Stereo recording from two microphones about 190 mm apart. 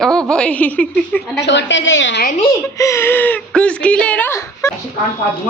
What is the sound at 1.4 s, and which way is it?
Speech, 65° left (ahead or behind).